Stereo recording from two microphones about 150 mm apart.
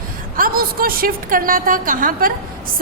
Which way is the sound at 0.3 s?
75° right (ahead or behind).